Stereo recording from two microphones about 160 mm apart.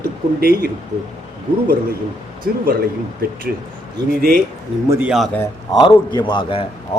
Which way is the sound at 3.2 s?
65° right (ahead or behind).